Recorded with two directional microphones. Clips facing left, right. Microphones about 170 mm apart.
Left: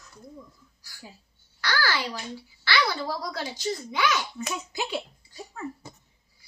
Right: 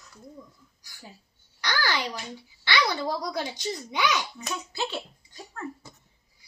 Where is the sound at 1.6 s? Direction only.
20° right (ahead or behind).